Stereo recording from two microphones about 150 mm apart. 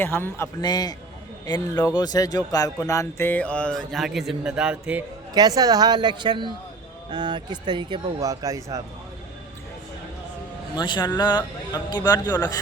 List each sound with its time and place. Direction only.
0.0 s speech: 15° left (ahead or behind)
0.6 s a man's voice: 25° left (ahead or behind); by 5.0 s 10° right (ahead or behind)
5.3 s speech: 25° right (ahead or behind)
8.2 s speech: 20° right (ahead or behind)
10.8 s a man's voice: 30° left (ahead or behind)